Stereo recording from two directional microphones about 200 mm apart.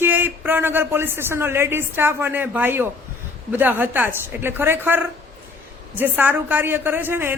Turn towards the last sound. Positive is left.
turn(degrees=-10)  # may be behind; listen again after turning